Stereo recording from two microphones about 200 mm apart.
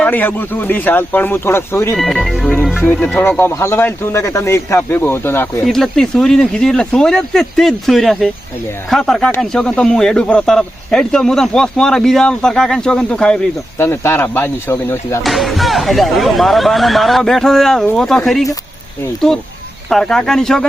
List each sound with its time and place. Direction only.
0.0 s speech: 10° left (ahead or behind)
2.0 s speech: centre (ahead or behind)
15.2 s speech: centre (ahead or behind)